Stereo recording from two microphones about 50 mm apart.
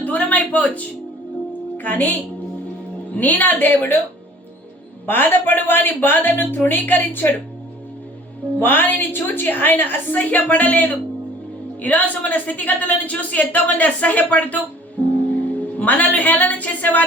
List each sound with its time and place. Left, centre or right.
0.0 s music: left
1.8 s a woman's voice: left
3.2 s a woman's voice: left
5.0 s a woman's voice: left
8.5 s a woman's voice: left
15.8 s a woman's voice: left